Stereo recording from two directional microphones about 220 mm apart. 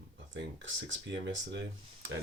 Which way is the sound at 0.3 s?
55° right (ahead or behind).